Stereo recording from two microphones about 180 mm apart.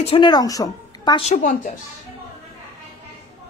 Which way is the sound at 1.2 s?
45° left (ahead or behind).